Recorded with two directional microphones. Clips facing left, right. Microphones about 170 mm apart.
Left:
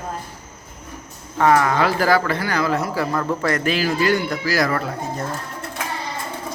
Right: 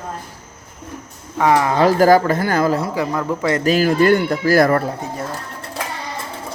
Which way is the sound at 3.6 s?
45° right (ahead or behind).